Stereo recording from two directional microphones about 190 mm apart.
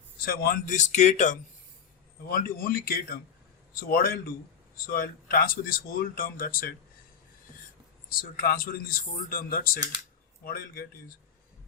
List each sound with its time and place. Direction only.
0.3 s speech: 50° left (ahead or behind)
2.3 s speech: 50° left (ahead or behind)
8.1 s speech: 50° left (ahead or behind)